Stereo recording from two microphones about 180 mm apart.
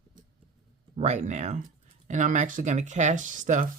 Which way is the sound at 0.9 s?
40° right (ahead or behind).